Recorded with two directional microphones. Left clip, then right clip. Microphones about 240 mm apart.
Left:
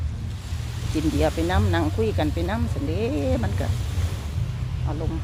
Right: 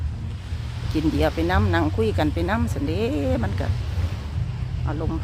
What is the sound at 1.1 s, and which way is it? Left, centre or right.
Speech, centre.